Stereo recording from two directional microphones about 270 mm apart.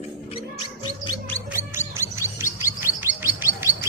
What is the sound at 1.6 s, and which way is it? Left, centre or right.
Chirp, centre.